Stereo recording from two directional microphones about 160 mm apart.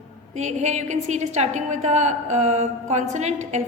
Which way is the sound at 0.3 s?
45° right (ahead or behind).